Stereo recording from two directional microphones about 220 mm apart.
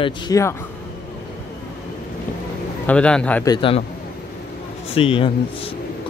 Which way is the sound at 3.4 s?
20° left (ahead or behind).